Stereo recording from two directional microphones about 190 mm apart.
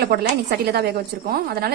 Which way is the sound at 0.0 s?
55° right (ahead or behind).